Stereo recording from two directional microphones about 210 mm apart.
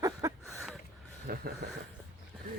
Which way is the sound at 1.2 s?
45° right (ahead or behind).